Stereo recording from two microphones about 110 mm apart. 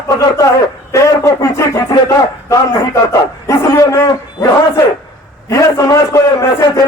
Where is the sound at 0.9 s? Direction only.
30° left (ahead or behind).